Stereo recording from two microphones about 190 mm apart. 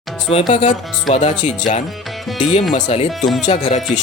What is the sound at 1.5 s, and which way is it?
Speech, 40° left (ahead or behind).